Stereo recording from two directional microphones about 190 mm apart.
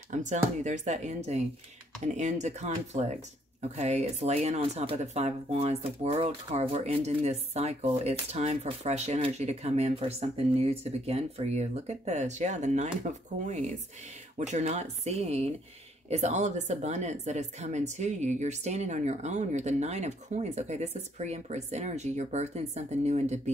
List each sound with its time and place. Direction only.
0.1 s speech: 40° right (ahead or behind)